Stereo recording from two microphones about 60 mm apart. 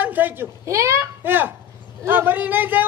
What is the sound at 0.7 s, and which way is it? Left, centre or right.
Speech, right.